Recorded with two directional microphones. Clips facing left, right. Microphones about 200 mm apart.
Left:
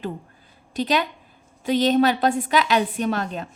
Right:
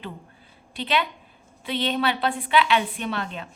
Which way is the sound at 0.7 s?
40° left (ahead or behind).